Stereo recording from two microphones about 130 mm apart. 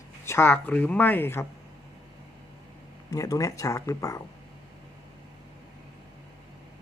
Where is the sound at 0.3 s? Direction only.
15° left (ahead or behind).